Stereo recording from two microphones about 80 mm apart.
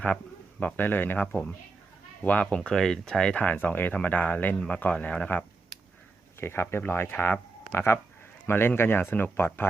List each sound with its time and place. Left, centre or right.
0.6 s speech: left
6.4 s speech: left